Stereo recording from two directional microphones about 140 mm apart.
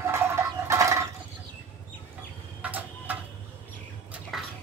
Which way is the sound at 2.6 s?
10° right (ahead or behind).